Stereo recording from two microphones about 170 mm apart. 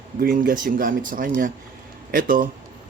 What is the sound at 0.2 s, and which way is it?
Speech, 50° right (ahead or behind).